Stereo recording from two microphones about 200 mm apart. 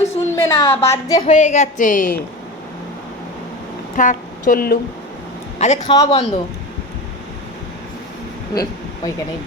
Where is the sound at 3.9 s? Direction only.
40° left (ahead or behind).